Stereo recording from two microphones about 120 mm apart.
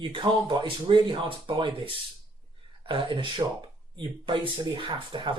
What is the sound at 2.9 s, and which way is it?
Speech, 40° right (ahead or behind).